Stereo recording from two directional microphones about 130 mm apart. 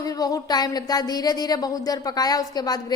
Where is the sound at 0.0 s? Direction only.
30° left (ahead or behind).